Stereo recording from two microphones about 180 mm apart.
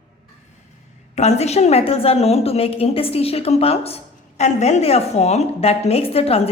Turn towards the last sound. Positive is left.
turn(degrees=35)  # may be behind; listen again after turning